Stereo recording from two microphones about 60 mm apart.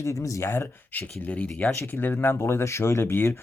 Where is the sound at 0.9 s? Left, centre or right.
Left.